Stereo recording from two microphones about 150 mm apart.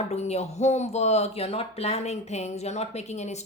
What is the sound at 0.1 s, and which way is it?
Speech, 45° left (ahead or behind).